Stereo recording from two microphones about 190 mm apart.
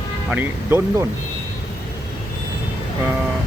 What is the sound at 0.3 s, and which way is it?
Speech, 10° right (ahead or behind).